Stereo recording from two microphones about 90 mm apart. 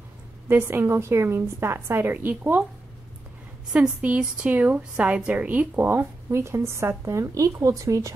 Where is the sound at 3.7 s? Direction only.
10° right (ahead or behind).